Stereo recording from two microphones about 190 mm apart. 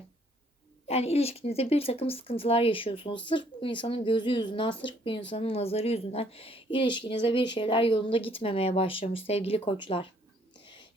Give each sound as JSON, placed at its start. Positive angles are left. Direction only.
{"t": 0.9, "sound": "speech", "side_deg": 30}